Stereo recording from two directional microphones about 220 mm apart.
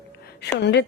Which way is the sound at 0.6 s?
50° left (ahead or behind).